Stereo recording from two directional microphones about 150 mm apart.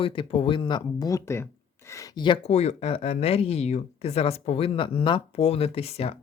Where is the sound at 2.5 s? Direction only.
45° left (ahead or behind).